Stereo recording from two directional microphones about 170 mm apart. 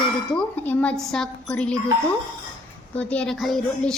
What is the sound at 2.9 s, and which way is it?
A woman's voice, 5° left (ahead or behind).